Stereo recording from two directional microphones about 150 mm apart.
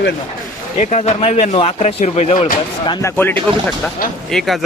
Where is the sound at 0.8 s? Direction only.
50° left (ahead or behind); by 3.0 s 35° left (ahead or behind).